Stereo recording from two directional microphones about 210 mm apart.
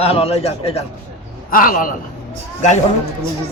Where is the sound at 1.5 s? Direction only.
40° left (ahead or behind).